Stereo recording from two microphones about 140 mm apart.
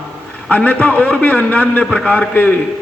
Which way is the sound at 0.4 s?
10° left (ahead or behind).